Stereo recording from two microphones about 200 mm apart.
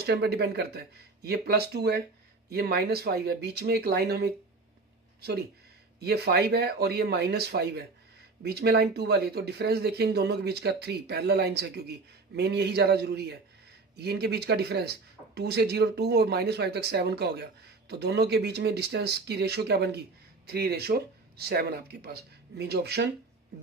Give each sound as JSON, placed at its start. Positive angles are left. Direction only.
{"t": 0.0, "sound": "speech", "side_deg": -55}
{"t": 5.9, "sound": "speech", "side_deg": -55}